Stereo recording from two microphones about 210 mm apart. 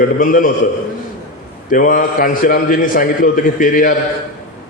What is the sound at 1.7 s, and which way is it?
A man's voice, 40° left (ahead or behind).